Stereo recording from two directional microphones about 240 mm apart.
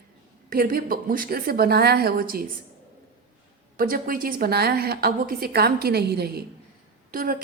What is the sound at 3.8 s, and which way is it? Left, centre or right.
A woman's voice, right.